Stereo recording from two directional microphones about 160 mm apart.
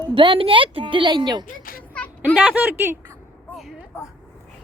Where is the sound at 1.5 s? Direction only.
65° left (ahead or behind).